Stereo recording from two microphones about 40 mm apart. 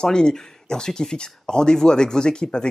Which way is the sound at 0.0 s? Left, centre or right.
Centre.